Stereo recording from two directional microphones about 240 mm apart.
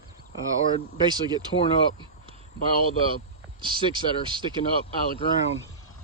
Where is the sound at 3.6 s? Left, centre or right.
Centre.